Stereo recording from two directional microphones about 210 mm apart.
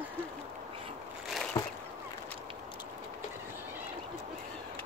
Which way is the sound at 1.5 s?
20° left (ahead or behind).